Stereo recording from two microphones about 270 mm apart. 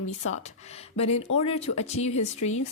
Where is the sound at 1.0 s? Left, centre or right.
Left.